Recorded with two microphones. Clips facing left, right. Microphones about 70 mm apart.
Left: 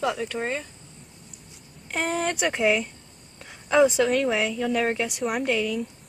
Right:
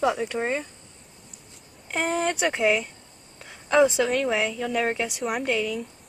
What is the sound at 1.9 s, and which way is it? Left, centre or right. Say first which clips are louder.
Speech: right 1 dB; centre.